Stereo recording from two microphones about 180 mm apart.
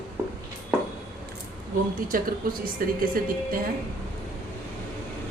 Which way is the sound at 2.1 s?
55° right (ahead or behind).